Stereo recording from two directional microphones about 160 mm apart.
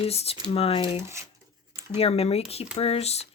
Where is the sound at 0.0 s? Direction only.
40° left (ahead or behind).